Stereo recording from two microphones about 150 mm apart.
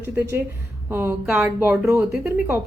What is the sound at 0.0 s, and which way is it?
A woman's voice, 15° right (ahead or behind).